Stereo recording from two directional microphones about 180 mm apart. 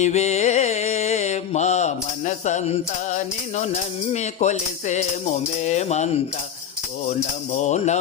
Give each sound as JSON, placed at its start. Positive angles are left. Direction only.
{"t": 0.0, "sound": "mantra", "side_deg": 40}
{"t": 5.5, "sound": "cutlery", "side_deg": 40}
{"t": 7.6, "sound": "cutlery", "side_deg": 40}